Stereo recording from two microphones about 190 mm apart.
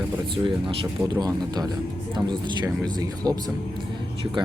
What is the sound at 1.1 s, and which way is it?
Speech, 20° right (ahead or behind).